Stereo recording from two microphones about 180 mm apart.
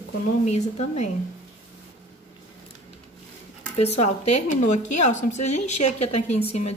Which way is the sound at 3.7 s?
35° left (ahead or behind).